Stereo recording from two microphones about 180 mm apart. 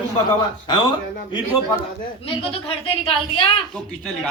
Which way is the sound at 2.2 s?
30° left (ahead or behind).